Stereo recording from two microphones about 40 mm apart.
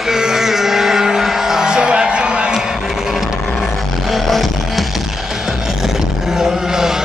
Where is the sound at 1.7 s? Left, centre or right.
Right.